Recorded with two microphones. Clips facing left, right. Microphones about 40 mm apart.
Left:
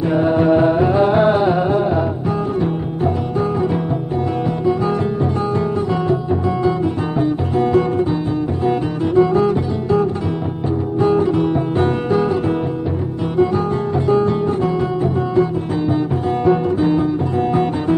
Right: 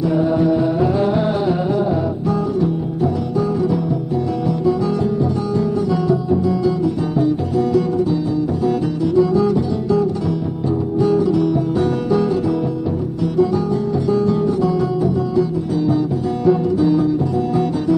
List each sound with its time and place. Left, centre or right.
0.1 s music: left
11.0 s guitar: left
14.0 s guitar: left
16.4 s music: left